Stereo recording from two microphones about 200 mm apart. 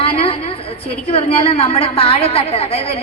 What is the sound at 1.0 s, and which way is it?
A woman's voice, 30° left (ahead or behind).